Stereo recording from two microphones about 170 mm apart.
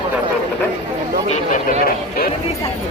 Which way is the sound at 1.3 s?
50° left (ahead or behind).